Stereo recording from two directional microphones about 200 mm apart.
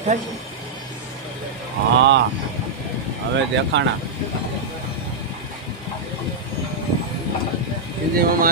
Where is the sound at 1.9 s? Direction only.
60° right (ahead or behind).